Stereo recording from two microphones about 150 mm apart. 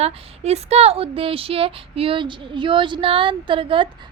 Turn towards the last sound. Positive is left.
turn(degrees=-35)  # may be behind; listen again after turning